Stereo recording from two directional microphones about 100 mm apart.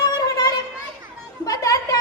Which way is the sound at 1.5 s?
35° left (ahead or behind).